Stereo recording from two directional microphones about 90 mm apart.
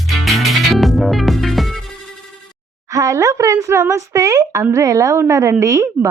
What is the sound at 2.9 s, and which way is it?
A woman's voice, 40° right (ahead or behind).